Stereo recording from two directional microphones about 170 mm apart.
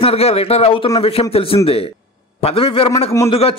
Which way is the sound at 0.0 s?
35° left (ahead or behind).